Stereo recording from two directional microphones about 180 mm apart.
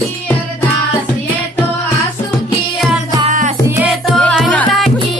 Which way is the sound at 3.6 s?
15° right (ahead or behind).